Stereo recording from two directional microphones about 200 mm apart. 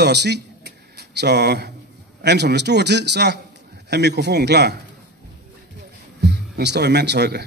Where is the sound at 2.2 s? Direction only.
55° right (ahead or behind).